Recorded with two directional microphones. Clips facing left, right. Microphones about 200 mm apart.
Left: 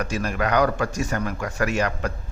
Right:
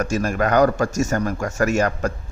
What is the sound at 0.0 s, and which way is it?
Speech, 45° right (ahead or behind).